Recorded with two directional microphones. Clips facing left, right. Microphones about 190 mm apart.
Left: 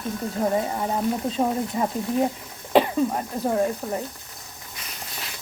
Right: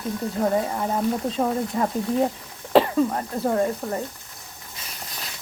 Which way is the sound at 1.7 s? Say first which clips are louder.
Right 2 dB; 10° left (ahead or behind).